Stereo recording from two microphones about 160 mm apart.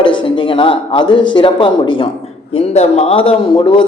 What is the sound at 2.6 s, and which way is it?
Speech, 40° left (ahead or behind).